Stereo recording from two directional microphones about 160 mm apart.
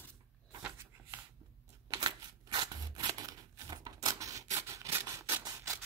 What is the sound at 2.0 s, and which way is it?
Scissors, 25° right (ahead or behind).